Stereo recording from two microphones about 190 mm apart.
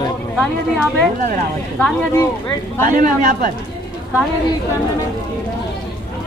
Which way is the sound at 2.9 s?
45° right (ahead or behind).